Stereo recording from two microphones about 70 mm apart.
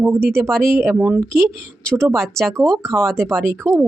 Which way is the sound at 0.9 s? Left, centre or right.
Right.